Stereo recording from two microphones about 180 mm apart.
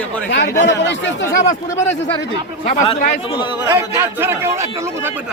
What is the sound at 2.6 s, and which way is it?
Speech, 35° left (ahead or behind).